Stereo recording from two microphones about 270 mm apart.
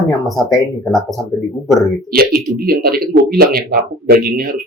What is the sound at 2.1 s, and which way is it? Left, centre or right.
Speech, right.